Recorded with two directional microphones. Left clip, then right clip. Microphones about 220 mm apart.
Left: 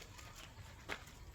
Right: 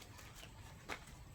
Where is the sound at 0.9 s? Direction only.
Centre (ahead or behind).